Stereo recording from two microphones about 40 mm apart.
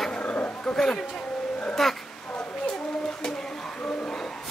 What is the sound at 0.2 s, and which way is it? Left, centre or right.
Dog, left.